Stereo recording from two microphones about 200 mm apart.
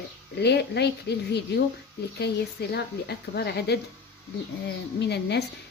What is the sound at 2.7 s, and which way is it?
A woman's voice, 55° left (ahead or behind).